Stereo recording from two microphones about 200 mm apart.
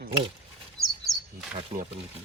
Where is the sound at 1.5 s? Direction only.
40° right (ahead or behind).